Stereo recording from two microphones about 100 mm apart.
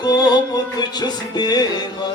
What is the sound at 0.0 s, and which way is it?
Music, 40° left (ahead or behind).